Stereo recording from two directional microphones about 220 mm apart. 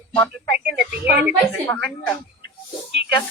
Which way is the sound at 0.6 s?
5° right (ahead or behind).